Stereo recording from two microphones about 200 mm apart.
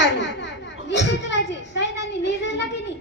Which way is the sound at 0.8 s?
60° left (ahead or behind).